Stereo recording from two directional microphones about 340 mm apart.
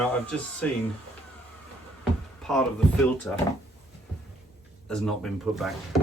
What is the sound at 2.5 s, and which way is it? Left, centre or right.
Speech, centre.